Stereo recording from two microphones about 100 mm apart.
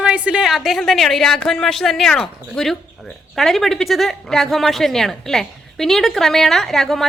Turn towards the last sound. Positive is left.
turn(degrees=5)  # may be behind; listen again after turning